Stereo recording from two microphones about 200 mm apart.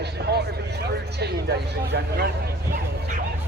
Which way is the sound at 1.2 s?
55° right (ahead or behind).